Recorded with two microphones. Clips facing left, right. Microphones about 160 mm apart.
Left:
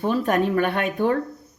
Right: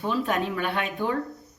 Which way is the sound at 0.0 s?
45° left (ahead or behind).